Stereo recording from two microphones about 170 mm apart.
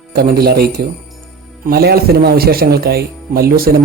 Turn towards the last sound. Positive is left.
turn(degrees=-60)  # may be behind; listen again after turning